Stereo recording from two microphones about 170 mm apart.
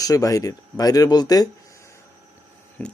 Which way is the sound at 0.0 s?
20° left (ahead or behind).